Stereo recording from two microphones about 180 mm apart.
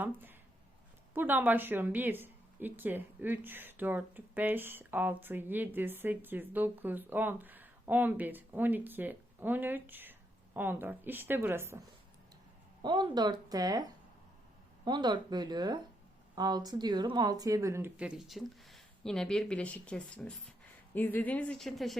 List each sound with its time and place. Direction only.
0.0 s a woman's voice: 10° right (ahead or behind)
12.8 s a woman's voice: 25° right (ahead or behind); by 21.9 s centre (ahead or behind)